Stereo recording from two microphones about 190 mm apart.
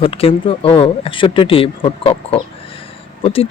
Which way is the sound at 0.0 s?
30° left (ahead or behind).